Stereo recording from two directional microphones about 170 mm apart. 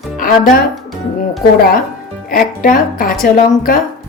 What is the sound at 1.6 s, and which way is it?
A woman's voice, 60° left (ahead or behind).